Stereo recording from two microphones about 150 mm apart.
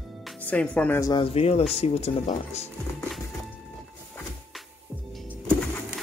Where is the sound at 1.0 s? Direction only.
35° left (ahead or behind).